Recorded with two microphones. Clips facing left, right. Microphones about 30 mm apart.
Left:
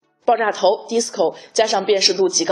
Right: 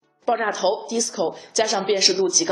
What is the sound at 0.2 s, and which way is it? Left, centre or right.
A woman's voice, centre.